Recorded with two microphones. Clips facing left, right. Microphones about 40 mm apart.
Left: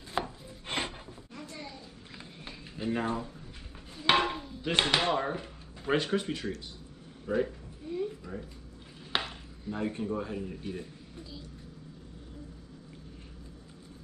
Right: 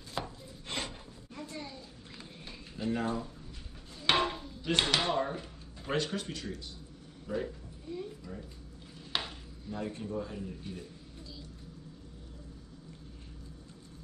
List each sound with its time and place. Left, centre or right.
0.1 s rub: left
2.8 s speech: centre
4.0 s a sound: centre
5.1 s speech: centre
7.2 s a sound: left
9.1 s speech: left